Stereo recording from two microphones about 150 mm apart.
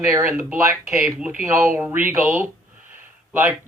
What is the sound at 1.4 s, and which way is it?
Speech, 15° right (ahead or behind).